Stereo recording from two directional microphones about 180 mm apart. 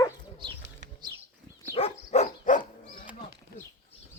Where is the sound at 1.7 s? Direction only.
35° left (ahead or behind).